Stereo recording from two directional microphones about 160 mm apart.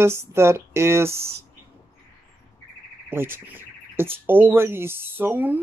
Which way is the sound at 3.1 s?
15° right (ahead or behind).